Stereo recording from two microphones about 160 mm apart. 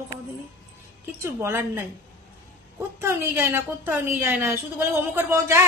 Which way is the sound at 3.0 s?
15° right (ahead or behind).